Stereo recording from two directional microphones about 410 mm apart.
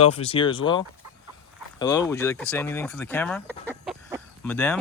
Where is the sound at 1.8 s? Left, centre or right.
Centre.